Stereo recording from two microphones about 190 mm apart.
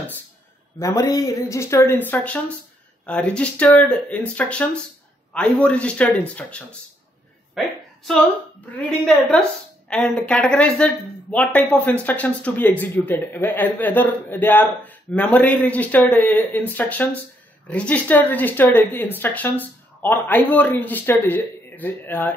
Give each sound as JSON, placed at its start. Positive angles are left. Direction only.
{"t": 0.7, "sound": "a woman's voice", "side_deg": 15}